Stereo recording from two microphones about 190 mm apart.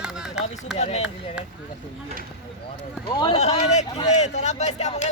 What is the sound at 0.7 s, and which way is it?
Speech, 35° left (ahead or behind).